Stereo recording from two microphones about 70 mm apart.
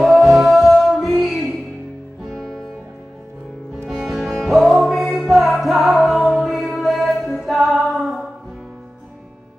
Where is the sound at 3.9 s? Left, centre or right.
Centre.